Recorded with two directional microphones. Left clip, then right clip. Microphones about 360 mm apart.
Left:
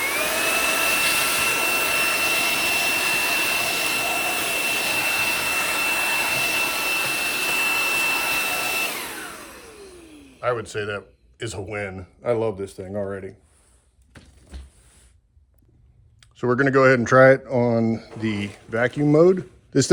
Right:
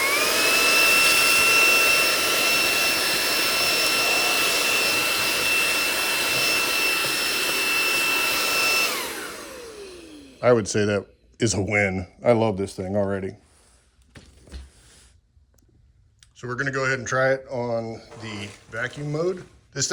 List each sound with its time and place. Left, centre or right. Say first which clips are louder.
0.0 s vacuum cleaner: right 2 dB; centre
10.4 s speech: right 6 dB; centre
16.2 s speech: left 7 dB; centre